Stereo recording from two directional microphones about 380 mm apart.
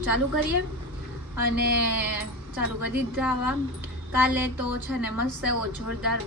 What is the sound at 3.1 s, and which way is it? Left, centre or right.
Speech, centre.